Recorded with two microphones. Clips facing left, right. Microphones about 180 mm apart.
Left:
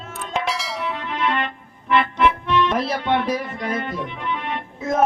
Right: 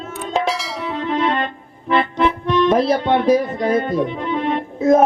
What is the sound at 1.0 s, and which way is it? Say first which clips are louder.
Music: right 6 dB; 35° right (ahead or behind).